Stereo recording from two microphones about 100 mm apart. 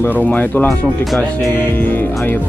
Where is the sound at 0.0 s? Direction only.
15° left (ahead or behind).